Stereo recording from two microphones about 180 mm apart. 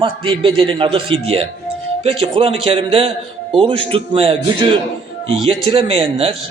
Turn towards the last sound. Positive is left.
turn(degrees=-30)  # may be behind; listen again after turning